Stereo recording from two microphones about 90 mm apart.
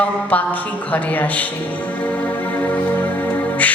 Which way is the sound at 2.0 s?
15° left (ahead or behind).